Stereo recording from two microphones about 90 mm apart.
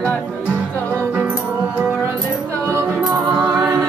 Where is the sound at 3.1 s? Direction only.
20° right (ahead or behind).